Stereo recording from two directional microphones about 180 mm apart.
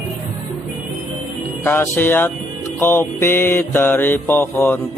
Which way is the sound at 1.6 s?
15° left (ahead or behind).